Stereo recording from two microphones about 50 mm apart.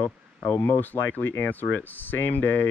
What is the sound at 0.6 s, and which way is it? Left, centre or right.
Speech, left.